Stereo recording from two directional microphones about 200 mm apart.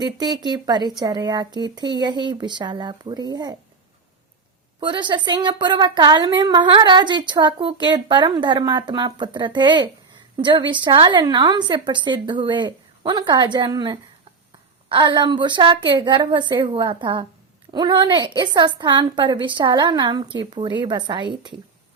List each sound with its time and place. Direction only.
0.0 s a woman's voice: 20° right (ahead or behind)
4.8 s a woman's voice: 20° right (ahead or behind)